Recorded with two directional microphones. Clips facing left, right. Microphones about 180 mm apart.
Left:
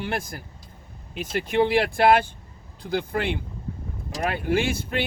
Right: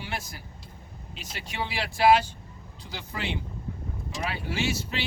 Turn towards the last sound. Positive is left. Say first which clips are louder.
# left 6 dB
turn(degrees=55)  # may be behind; listen again after turning